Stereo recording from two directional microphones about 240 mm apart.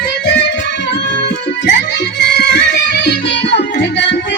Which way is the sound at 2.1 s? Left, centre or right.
Left.